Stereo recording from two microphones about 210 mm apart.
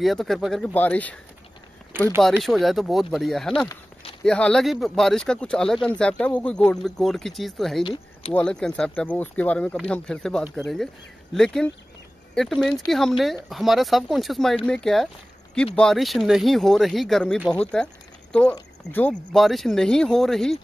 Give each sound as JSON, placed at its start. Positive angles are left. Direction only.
{"t": 0.0, "sound": "speech", "side_deg": 0}
{"t": 2.2, "sound": "speech", "side_deg": 0}
{"t": 7.8, "sound": "speech", "side_deg": 25}
{"t": 8.3, "sound": "speech", "side_deg": 5}